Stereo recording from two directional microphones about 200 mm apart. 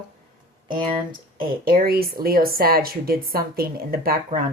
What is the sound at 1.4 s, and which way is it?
Speech, 50° right (ahead or behind).